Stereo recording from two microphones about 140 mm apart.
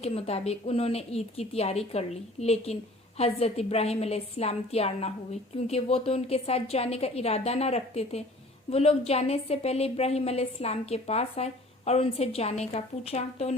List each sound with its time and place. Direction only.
0.0 s a woman's voice: 50° left (ahead or behind)